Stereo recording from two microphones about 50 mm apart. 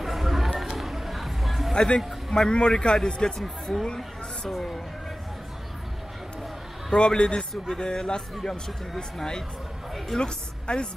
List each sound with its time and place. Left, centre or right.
0.0 s a sound: centre
2.3 s a man's voice: centre
6.9 s a man's voice: centre